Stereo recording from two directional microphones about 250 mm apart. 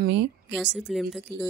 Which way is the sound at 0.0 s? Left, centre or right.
Right.